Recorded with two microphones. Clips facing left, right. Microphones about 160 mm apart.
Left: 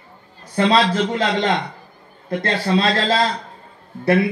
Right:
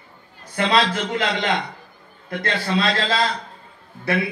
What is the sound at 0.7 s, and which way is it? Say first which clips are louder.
A man's voice: left 3 dB; 30° left (ahead or behind).